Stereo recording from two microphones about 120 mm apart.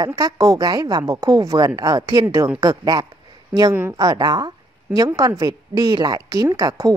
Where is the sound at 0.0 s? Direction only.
30° right (ahead or behind).